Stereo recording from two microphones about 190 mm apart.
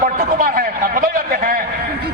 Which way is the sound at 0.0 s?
45° right (ahead or behind).